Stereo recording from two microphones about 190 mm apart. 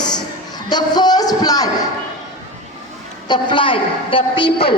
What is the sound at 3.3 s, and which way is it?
A woman's voice, 25° left (ahead or behind).